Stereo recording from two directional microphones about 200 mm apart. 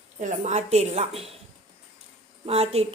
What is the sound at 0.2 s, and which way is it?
A woman's voice, 35° right (ahead or behind).